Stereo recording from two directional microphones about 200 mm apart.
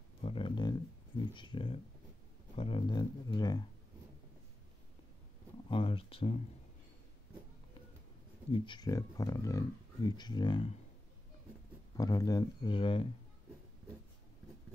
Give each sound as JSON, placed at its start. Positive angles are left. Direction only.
{"t": 0.2, "sound": "a sound", "side_deg": 25}
{"t": 1.3, "sound": "speech", "side_deg": 25}
{"t": 5.7, "sound": "speech", "side_deg": 25}
{"t": 8.5, "sound": "speech", "side_deg": 25}
{"t": 12.0, "sound": "speech", "side_deg": 20}